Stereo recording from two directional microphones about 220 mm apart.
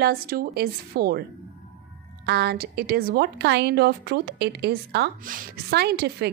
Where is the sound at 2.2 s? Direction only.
45° right (ahead or behind).